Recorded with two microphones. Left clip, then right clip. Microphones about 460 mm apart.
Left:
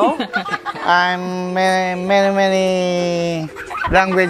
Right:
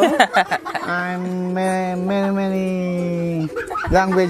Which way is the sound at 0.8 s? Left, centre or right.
Left.